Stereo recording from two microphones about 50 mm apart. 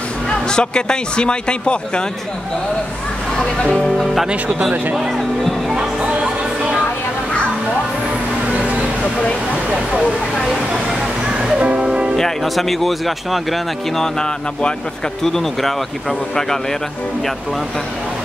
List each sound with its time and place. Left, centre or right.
0.5 s a man's voice: centre
3.7 s speech: centre
5.7 s music: centre
11.6 s music: right
12.2 s speech: centre